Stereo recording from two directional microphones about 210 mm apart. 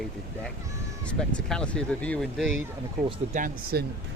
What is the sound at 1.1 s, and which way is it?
Speech, 5° left (ahead or behind).